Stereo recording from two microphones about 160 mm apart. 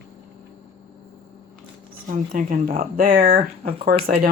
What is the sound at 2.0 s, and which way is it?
Speech, 55° right (ahead or behind).